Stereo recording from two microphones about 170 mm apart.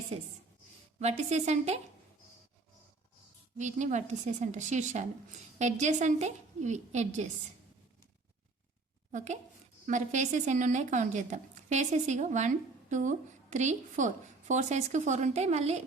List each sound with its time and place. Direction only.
0.1 s a woman's voice: 40° right (ahead or behind)
3.6 s a woman's voice: 45° right (ahead or behind)
9.1 s a woman's voice: 45° right (ahead or behind)